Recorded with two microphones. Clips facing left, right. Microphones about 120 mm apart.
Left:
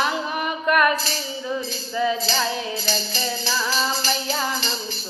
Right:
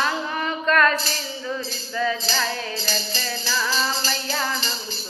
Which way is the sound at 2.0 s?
20° left (ahead or behind).